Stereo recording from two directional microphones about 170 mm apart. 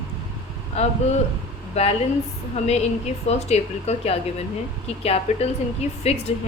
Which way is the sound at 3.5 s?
40° left (ahead or behind).